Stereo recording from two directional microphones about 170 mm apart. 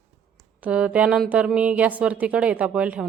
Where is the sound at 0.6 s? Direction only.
5° right (ahead or behind).